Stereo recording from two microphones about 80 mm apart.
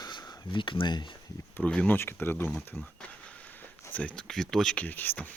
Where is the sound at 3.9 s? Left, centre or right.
Centre.